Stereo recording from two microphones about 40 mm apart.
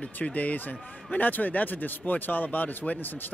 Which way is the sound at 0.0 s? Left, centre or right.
Left.